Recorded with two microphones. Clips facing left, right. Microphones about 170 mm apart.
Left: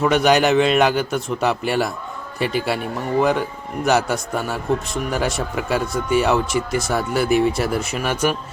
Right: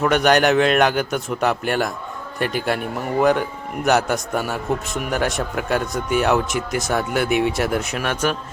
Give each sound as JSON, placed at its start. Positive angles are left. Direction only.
{"t": 0.0, "sound": "speech", "side_deg": 5}